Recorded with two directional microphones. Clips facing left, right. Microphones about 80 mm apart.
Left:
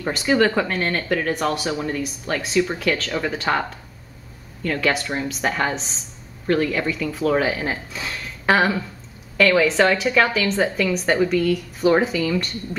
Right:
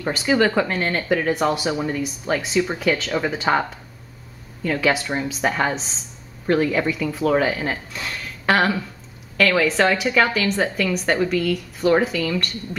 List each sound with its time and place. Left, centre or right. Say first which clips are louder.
0.0 s a woman's voice: even; centre
4.6 s a woman's voice: right 1 dB; centre